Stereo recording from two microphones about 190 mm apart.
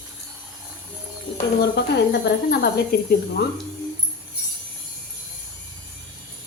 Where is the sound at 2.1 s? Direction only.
60° left (ahead or behind).